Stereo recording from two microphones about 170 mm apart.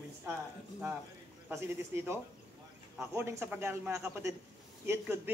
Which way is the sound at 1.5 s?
15° right (ahead or behind).